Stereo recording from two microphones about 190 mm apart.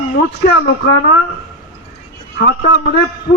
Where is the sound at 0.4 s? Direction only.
60° left (ahead or behind).